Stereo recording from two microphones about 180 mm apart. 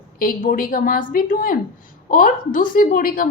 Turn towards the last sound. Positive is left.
turn(degrees=50)  # may be behind; listen again after turning